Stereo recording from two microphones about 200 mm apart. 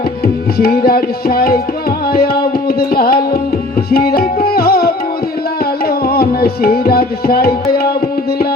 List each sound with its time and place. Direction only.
0.6 s tabla: 50° left (ahead or behind)
2.1 s music: 50° left (ahead or behind)
3.9 s tabla: 50° left (ahead or behind)
5.8 s music: 50° left (ahead or behind)